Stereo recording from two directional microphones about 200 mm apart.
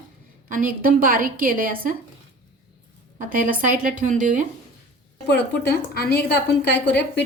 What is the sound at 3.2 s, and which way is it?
A woman's voice, 40° right (ahead or behind).